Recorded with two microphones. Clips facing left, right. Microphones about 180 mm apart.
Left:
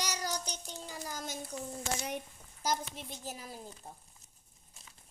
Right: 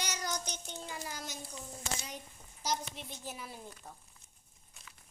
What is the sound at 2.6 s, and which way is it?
Speech, 45° left (ahead or behind).